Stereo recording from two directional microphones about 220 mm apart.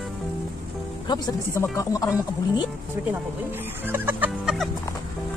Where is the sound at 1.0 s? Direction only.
20° left (ahead or behind).